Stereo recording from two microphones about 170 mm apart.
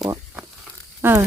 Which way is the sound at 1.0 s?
15° right (ahead or behind).